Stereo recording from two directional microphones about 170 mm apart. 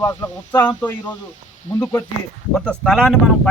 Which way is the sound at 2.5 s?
5° left (ahead or behind).